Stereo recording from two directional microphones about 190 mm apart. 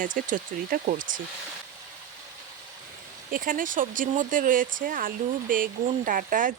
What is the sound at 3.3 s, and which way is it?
A woman's voice, 45° right (ahead or behind).